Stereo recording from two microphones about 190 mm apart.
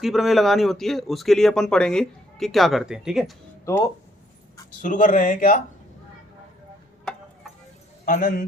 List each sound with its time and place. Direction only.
0.0 s speech: centre (ahead or behind)
4.8 s speech: 45° left (ahead or behind)
7.0 s tick-tock: 5° left (ahead or behind)
8.0 s a man's voice: 50° left (ahead or behind)